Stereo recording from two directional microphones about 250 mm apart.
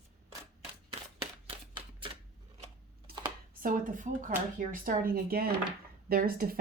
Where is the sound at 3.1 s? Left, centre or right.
Right.